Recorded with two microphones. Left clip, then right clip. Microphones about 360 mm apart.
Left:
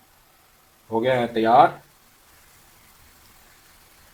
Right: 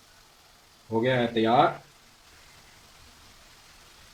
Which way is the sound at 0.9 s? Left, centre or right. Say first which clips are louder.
Left 4 dB; left.